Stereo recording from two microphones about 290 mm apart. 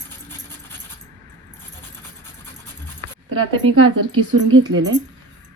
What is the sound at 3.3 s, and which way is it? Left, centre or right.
Speech, right.